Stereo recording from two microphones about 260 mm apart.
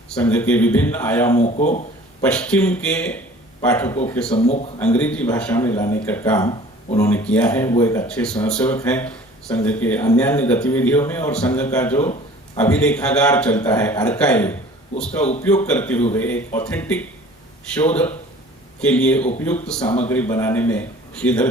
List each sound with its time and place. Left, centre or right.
0.1 s speech: centre
1.4 s a man's voice: left
2.2 s a man's voice: centre
4.4 s a man's voice: left
4.9 s a man's voice: centre
19.8 s a man's voice: centre
20.1 s speech: centre